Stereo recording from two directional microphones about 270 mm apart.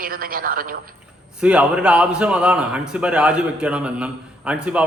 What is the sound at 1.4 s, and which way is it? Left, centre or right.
A man's voice, centre.